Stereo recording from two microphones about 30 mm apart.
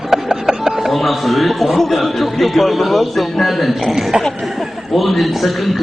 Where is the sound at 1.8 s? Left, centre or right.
Centre.